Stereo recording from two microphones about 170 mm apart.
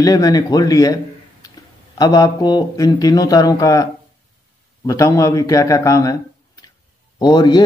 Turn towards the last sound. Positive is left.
turn(degrees=25)  # may be behind; listen again after turning